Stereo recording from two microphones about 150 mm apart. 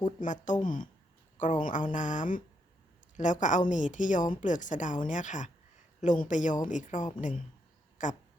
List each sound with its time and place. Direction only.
0.0 s a woman's voice: 55° left (ahead or behind)